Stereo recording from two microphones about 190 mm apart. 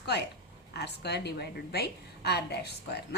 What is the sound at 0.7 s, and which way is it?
A woman's voice, 60° left (ahead or behind).